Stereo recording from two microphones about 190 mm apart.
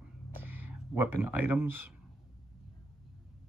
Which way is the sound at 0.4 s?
10° right (ahead or behind).